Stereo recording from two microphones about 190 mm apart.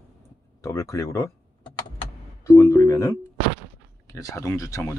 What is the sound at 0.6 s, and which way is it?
Power windows, 15° left (ahead or behind).